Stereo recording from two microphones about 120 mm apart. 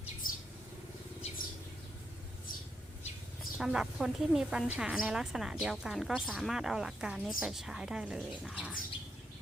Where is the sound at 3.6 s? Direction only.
5° right (ahead or behind).